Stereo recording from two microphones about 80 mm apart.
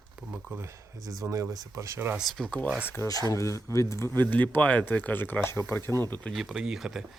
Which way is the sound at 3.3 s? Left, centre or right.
Left.